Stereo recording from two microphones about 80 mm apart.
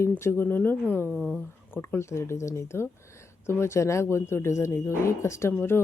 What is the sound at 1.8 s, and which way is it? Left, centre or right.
Speech, left.